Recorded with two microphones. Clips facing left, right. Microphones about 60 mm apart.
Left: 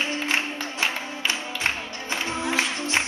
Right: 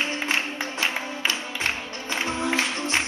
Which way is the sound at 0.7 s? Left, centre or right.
Left.